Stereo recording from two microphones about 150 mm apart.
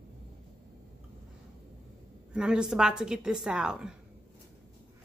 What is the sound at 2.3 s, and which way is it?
A woman's voice, 5° right (ahead or behind).